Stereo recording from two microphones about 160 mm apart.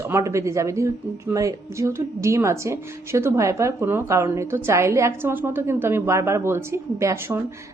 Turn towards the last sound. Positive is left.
turn(degrees=-15)  # may be behind; listen again after turning